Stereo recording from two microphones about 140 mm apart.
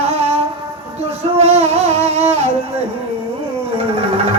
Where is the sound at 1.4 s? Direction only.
50° right (ahead or behind).